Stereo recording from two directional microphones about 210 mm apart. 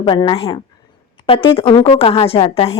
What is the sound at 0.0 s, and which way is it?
A woman's voice, 20° left (ahead or behind).